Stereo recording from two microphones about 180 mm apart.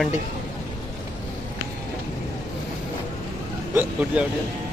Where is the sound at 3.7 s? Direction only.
10° right (ahead or behind).